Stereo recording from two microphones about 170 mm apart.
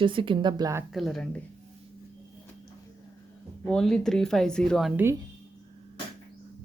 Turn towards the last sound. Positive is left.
turn(degrees=-15)  # may be behind; listen again after turning